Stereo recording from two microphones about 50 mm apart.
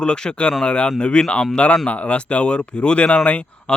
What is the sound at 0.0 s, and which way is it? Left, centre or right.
Speech, centre.